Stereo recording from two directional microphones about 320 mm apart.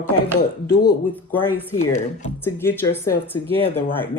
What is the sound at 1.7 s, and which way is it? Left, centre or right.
Speech, left.